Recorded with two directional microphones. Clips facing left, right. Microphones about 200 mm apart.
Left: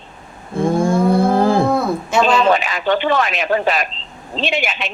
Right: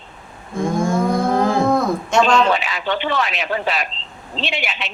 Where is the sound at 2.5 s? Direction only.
45° left (ahead or behind).